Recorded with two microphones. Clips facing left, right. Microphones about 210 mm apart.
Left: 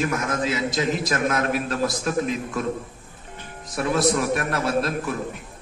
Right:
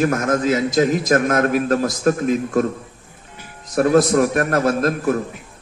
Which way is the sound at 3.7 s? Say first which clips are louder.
Right 7 dB; 45° right (ahead or behind).